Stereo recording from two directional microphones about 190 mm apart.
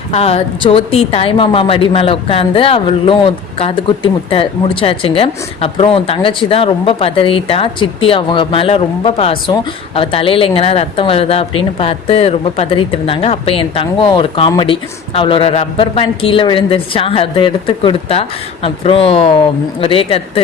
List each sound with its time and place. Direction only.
0.1 s a woman's voice: 30° left (ahead or behind)